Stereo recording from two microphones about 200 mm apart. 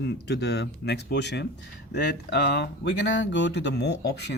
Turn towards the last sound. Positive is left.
turn(degrees=55)  # may be behind; listen again after turning